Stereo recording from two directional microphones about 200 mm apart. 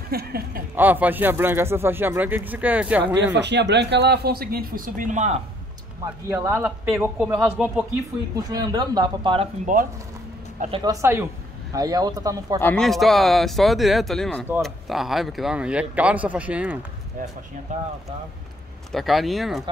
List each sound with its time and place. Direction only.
0.1 s speech: 50° right (ahead or behind)
0.7 s speech: 10° right (ahead or behind)
3.3 s speech: 60° right (ahead or behind); by 5.4 s 35° right (ahead or behind)
6.2 s speech: 15° right (ahead or behind)
8.4 s speech: 20° right (ahead or behind)
9.7 s speech: 40° right (ahead or behind)
10.7 s speech: 20° right (ahead or behind)
12.5 s speech: 5° left (ahead or behind)
17.7 s speech: 40° right (ahead or behind)
18.9 s speech: centre (ahead or behind)